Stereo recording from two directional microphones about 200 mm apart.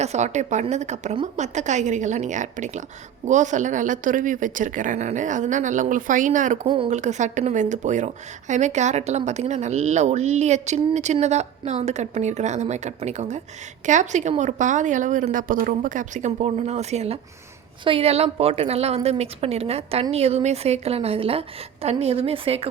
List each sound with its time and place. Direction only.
0.0 s speech: 35° right (ahead or behind)
6.7 s speech: 25° right (ahead or behind)